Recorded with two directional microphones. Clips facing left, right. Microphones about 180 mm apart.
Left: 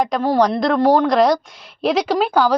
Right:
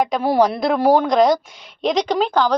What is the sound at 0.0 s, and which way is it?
A woman's voice, 5° right (ahead or behind).